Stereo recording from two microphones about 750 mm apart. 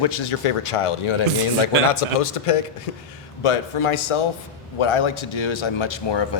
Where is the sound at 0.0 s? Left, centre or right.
Left.